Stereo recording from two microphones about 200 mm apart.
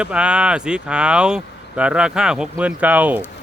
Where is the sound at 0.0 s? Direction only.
5° right (ahead or behind).